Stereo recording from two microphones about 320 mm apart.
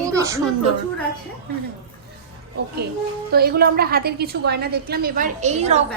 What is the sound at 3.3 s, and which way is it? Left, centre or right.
A woman's voice, right.